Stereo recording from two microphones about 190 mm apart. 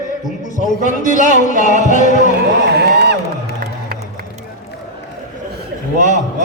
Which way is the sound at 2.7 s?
60° right (ahead or behind).